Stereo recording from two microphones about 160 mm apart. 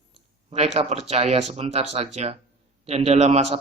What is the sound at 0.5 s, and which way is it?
Speech, 40° right (ahead or behind).